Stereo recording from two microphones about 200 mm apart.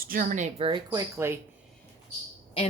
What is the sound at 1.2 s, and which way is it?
Speech, 10° right (ahead or behind).